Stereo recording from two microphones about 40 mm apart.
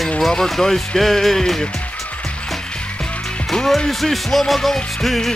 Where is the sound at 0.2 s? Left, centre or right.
Centre.